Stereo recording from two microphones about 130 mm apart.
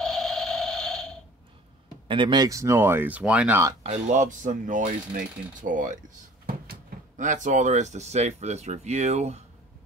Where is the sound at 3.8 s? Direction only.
65° right (ahead or behind).